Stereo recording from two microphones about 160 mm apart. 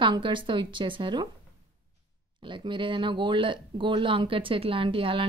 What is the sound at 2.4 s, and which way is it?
Speech, 30° right (ahead or behind).